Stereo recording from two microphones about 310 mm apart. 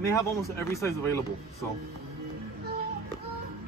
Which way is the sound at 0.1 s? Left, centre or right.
Centre.